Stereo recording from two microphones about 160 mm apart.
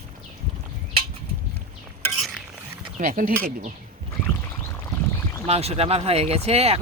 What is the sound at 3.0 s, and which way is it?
Speech, 55° right (ahead or behind).